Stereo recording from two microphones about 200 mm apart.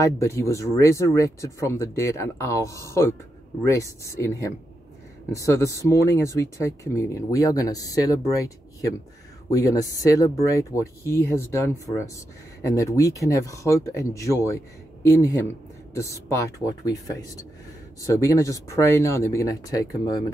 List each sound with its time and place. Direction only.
0.0 s speech: 15° left (ahead or behind)
9.5 s speech: 15° left (ahead or behind)